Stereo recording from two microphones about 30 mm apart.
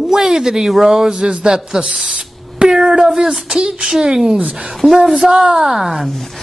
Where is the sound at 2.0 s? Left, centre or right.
Right.